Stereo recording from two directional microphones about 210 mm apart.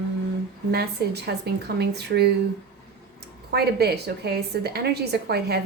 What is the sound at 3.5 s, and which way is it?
A woman's voice, 50° right (ahead or behind).